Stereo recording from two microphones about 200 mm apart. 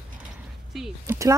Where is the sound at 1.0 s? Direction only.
15° right (ahead or behind).